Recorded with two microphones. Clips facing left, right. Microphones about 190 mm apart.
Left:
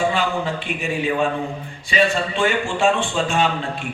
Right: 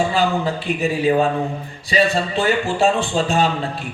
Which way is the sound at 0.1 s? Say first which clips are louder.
Right 3 dB; 35° right (ahead or behind).